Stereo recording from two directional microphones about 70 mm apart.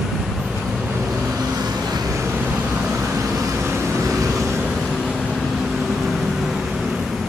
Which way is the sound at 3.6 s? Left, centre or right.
Right.